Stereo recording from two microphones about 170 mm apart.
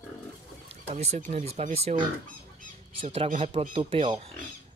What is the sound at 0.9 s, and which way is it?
Speech, 40° right (ahead or behind).